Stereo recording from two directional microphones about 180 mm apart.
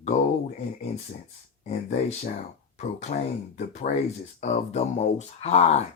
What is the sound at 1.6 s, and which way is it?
Speech, 40° left (ahead or behind).